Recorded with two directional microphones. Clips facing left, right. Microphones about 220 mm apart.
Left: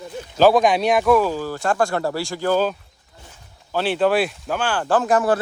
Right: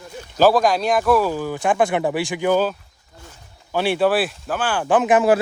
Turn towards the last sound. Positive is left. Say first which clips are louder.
# right 2 dB
turn(degrees=-20)  # may be behind; listen again after turning